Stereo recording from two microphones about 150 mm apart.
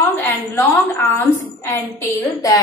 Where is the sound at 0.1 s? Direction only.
15° left (ahead or behind).